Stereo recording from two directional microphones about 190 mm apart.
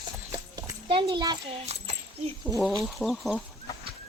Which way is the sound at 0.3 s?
25° right (ahead or behind).